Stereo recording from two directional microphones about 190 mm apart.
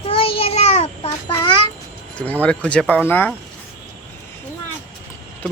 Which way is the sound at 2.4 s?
5° left (ahead or behind).